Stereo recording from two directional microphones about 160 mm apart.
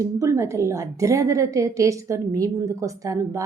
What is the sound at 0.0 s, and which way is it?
A woman's voice, 20° right (ahead or behind).